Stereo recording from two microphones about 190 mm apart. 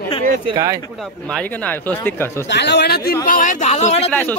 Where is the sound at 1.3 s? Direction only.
5° left (ahead or behind).